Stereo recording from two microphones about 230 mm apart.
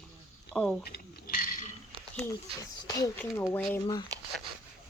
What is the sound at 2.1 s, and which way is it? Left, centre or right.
Speech, centre.